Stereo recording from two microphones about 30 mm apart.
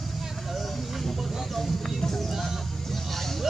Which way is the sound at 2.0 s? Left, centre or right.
Centre.